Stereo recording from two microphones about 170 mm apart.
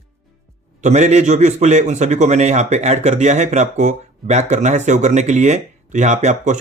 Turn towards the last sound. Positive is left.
turn(degrees=-45)  # may be behind; listen again after turning